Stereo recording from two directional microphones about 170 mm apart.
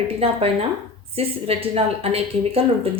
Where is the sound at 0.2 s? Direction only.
35° right (ahead or behind).